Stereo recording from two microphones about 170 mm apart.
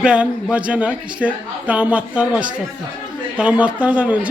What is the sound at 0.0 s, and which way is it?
A man's voice, 5° right (ahead or behind).